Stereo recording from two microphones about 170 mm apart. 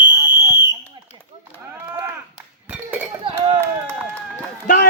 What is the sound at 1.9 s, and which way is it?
Chop, 15° right (ahead or behind).